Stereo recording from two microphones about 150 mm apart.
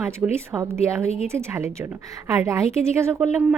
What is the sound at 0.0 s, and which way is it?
A woman's voice, 15° right (ahead or behind).